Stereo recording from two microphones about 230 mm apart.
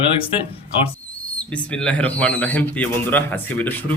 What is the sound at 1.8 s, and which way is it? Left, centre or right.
A man's voice, centre.